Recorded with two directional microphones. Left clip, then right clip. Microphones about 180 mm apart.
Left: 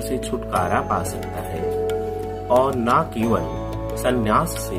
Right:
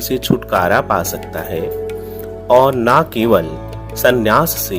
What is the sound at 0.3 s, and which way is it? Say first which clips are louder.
Speech: right 8 dB; 60° right (ahead or behind).